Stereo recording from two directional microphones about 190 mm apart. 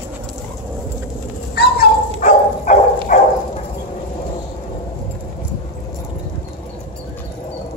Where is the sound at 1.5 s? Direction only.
60° left (ahead or behind).